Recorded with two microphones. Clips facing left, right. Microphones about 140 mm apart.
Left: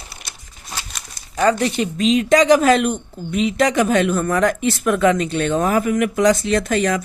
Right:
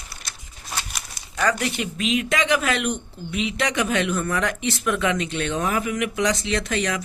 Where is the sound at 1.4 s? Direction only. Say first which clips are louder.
Left 6 dB; 30° left (ahead or behind).